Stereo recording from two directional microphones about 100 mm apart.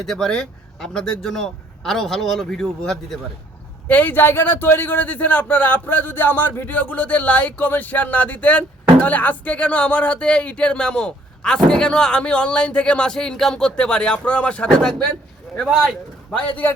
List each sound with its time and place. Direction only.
0.0 s speech: 5° left (ahead or behind)
3.8 s a man's voice: 15° left (ahead or behind); by 15.8 s centre (ahead or behind)
16.3 s a man's voice: 15° left (ahead or behind)